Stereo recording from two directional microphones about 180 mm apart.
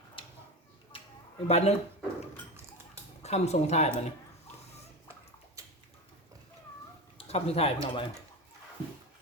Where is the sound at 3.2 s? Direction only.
35° left (ahead or behind).